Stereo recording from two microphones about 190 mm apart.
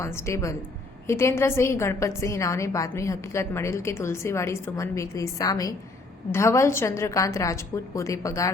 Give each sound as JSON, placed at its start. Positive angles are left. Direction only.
{"t": 0.0, "sound": "a woman's voice", "side_deg": 15}